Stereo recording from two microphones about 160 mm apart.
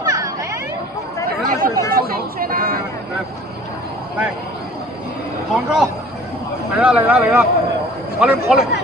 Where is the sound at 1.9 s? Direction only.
70° right (ahead or behind).